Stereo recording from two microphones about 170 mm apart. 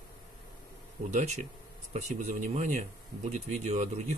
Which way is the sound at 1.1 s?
40° right (ahead or behind).